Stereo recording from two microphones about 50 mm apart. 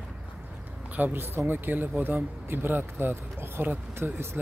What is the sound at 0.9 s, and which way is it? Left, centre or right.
Speech, right.